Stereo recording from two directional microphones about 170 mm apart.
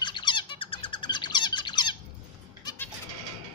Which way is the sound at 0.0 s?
30° left (ahead or behind).